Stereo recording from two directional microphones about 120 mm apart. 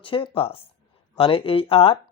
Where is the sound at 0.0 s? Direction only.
45° left (ahead or behind).